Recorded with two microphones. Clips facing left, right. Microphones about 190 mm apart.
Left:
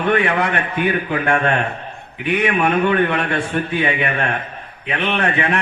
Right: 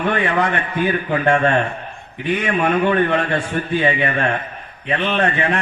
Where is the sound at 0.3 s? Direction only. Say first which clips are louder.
Even; 65° left (ahead or behind).